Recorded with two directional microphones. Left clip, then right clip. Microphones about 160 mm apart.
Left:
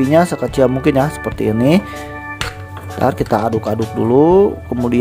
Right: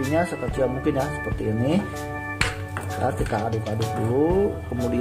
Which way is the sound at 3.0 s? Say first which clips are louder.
Left 11 dB; 55° left (ahead or behind).